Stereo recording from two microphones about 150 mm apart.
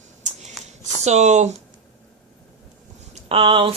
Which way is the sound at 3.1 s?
40° right (ahead or behind).